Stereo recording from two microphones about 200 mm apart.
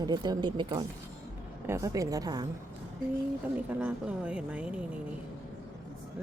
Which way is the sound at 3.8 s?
5° right (ahead or behind).